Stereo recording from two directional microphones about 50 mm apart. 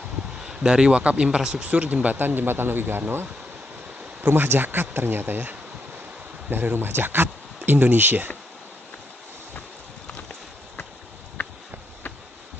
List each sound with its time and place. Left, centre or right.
0.4 s speech: centre
2.1 s speech: right
4.2 s speech: right
11.4 s a sound: left